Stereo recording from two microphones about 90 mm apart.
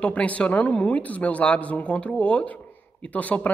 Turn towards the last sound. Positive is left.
turn(degrees=15)  # may be behind; listen again after turning